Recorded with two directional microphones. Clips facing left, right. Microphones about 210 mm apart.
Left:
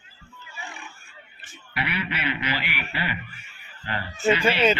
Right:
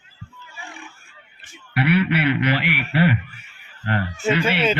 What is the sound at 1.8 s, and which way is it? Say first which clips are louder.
Speech: right 11 dB; 65° right (ahead or behind).